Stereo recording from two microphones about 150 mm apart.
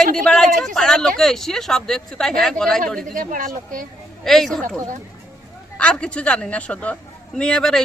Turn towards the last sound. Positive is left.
turn(degrees=5)  # may be behind; listen again after turning